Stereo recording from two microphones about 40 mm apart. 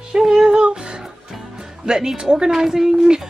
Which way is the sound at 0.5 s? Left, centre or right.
Right.